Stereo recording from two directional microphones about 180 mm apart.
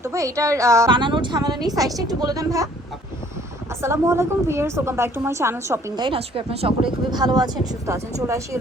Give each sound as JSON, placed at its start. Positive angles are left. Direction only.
{"t": 0.0, "sound": "a woman's voice", "side_deg": -15}
{"t": 0.9, "sound": "a woman's voice", "side_deg": -25}
{"t": 3.8, "sound": "a woman's voice", "side_deg": -15}
{"t": 6.1, "sound": "a woman's voice", "side_deg": -30}